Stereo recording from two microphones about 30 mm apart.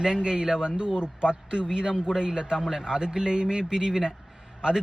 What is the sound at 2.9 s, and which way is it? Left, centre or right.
A man's voice, right.